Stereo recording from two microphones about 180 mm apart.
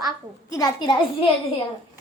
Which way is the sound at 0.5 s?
25° left (ahead or behind).